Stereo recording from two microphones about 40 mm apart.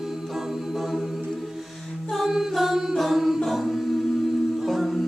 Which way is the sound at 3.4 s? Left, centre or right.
Centre.